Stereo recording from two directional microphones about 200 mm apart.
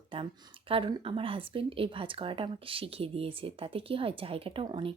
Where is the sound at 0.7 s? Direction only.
25° right (ahead or behind).